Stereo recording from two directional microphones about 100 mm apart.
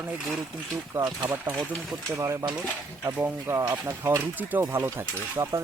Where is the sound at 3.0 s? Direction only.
25° right (ahead or behind).